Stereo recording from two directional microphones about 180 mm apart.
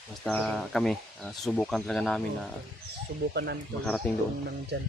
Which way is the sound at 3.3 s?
65° right (ahead or behind).